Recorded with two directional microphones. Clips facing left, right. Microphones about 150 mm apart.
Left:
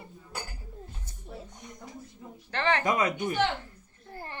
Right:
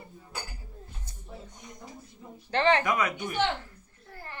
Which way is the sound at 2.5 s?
20° right (ahead or behind).